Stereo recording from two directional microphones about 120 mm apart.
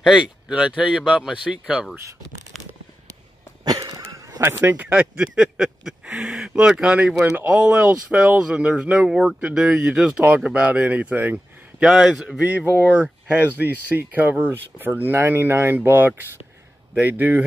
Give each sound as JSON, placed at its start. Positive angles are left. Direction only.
{"t": 0.1, "sound": "speech", "side_deg": -10}
{"t": 3.6, "sound": "a sound", "side_deg": -30}
{"t": 4.4, "sound": "a man's voice", "side_deg": -20}